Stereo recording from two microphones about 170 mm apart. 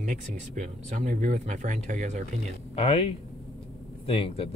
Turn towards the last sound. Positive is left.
turn(degrees=35)  # may be behind; listen again after turning